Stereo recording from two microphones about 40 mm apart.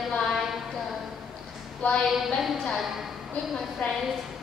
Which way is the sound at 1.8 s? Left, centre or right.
Left.